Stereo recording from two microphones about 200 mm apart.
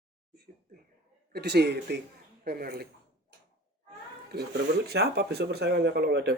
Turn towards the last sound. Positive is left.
turn(degrees=-55)  # may be behind; listen again after turning